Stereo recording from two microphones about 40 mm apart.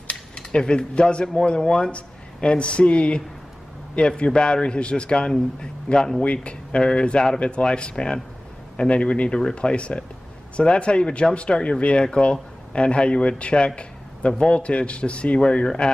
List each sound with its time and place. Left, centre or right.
0.1 s speech: left
4.2 s a man's voice: left
6.2 s speech: left
6.8 s a man's voice: left